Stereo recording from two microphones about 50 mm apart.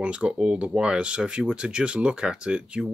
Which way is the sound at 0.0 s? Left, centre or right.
Right.